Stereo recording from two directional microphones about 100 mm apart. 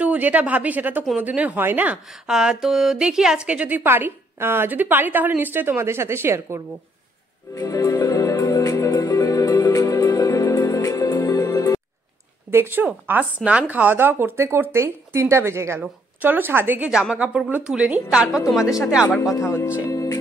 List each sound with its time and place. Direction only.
0.0 s a woman's voice: 15° right (ahead or behind)
2.2 s a woman's voice: 5° right (ahead or behind); by 6.6 s 25° right (ahead or behind)
7.5 s music: 35° left (ahead or behind)
12.4 s a woman's voice: 25° right (ahead or behind)
16.9 s a woman's voice: 5° right (ahead or behind)
19.3 s speech: 25° left (ahead or behind)
19.9 s music: 35° left (ahead or behind)